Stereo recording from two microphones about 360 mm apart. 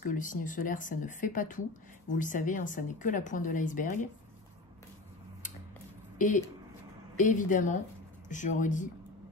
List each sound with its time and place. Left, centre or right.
0.0 s a woman's voice: left
6.1 s a woman's voice: left